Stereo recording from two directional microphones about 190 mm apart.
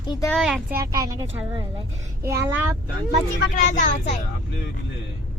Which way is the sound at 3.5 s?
40° left (ahead or behind).